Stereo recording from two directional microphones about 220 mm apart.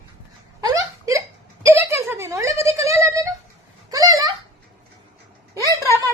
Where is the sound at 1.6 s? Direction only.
10° right (ahead or behind).